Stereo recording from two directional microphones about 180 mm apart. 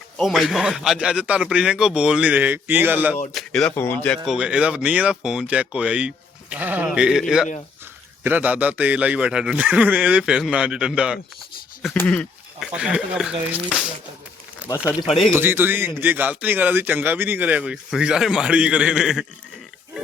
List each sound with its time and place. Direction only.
0.2 s speech: centre (ahead or behind)
3.3 s speech: centre (ahead or behind)
4.3 s speech: 5° right (ahead or behind)
11.9 s a sound: 5° left (ahead or behind)
12.7 s speech: 5° right (ahead or behind)